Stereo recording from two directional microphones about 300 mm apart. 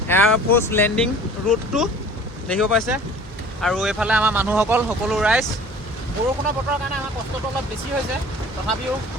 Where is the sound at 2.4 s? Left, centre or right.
Centre.